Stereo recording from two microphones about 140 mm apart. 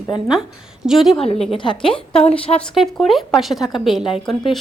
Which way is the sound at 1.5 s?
35° left (ahead or behind).